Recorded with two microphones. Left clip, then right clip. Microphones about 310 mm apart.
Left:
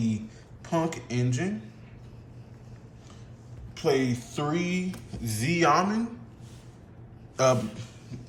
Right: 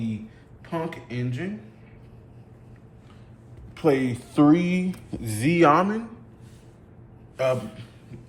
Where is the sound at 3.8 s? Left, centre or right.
Centre.